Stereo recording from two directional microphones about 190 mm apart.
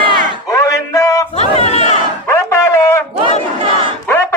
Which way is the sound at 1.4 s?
35° left (ahead or behind).